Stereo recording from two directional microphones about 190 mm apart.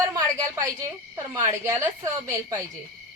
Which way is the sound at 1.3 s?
15° right (ahead or behind).